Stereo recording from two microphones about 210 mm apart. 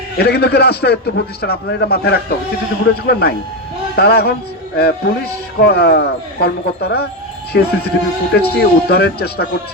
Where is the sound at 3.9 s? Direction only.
50° left (ahead or behind).